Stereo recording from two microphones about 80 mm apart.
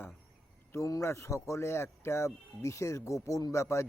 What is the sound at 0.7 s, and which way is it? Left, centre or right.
Speech, left.